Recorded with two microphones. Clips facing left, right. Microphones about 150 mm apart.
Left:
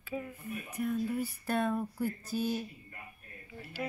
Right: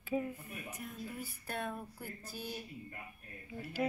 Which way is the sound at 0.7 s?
65° left (ahead or behind).